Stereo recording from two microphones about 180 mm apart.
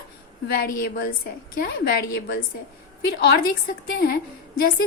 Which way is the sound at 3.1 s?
60° left (ahead or behind).